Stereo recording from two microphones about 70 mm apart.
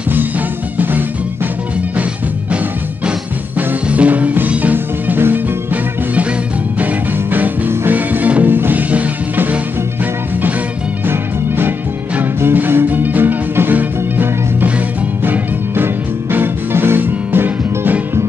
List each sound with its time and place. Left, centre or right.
0.7 s music: right
3.1 s music: centre
11.1 s music: right